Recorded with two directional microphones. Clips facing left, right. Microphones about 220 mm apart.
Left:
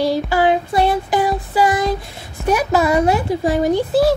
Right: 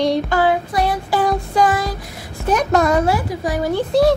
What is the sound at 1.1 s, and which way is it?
A woman's voice, 10° left (ahead or behind).